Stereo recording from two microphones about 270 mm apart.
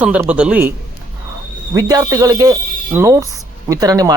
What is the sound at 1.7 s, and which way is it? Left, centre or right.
A woman's voice, centre.